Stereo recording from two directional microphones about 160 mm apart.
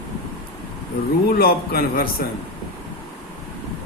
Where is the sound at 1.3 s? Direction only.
70° left (ahead or behind).